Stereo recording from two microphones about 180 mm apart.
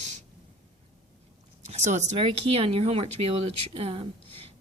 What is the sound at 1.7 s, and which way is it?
Speech, 40° right (ahead or behind).